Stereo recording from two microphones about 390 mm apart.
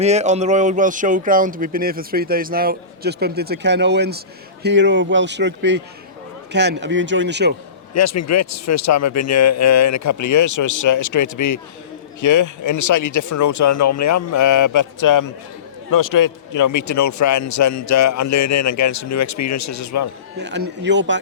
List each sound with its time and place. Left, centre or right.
0.0 s speech: centre
7.9 s a man's voice: left
20.4 s speech: right